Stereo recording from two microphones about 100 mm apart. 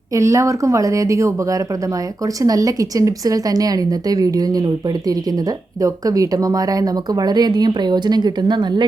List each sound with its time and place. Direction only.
0.1 s speech: 30° right (ahead or behind); by 8.9 s 45° right (ahead or behind)